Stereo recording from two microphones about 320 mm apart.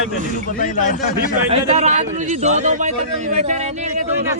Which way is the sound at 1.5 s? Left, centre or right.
Right.